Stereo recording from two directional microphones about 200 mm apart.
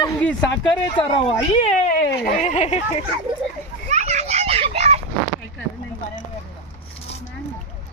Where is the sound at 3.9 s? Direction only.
35° right (ahead or behind).